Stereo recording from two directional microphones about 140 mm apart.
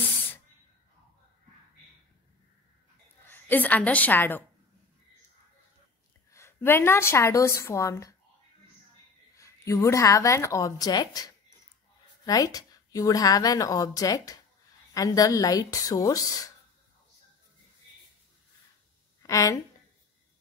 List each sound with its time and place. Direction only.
3.3 s a woman's voice: 15° left (ahead or behind)
6.3 s a woman's voice: 15° left (ahead or behind)
9.4 s a woman's voice: 20° left (ahead or behind)
19.2 s a woman's voice: 25° left (ahead or behind)